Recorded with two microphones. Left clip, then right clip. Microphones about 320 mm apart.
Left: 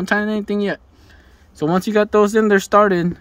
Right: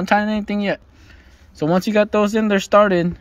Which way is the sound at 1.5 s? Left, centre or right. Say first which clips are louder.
Even; centre.